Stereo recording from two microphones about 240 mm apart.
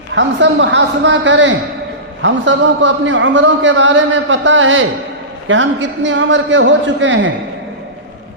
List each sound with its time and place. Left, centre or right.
0.1 s a man's voice: right